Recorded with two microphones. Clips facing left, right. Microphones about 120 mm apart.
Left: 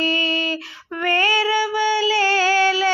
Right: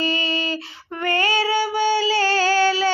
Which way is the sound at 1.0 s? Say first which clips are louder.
Left 1 dB; 30° right (ahead or behind).